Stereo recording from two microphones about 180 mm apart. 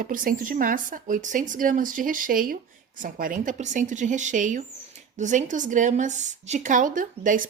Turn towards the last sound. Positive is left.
turn(degrees=-45)  # may be behind; listen again after turning